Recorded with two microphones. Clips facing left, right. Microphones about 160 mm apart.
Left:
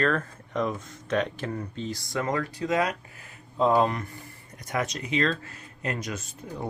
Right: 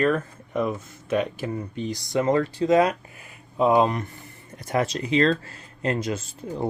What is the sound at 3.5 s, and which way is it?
Speech, 15° right (ahead or behind).